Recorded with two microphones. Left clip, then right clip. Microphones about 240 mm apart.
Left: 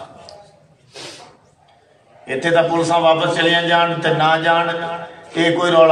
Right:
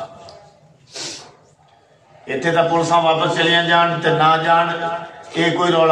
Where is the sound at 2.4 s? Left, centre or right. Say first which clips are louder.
Left 1 dB; left.